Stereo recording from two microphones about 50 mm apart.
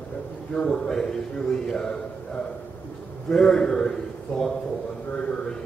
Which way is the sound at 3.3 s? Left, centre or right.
Centre.